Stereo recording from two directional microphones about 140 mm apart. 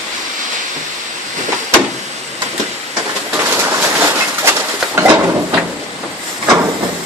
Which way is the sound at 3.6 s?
20° right (ahead or behind).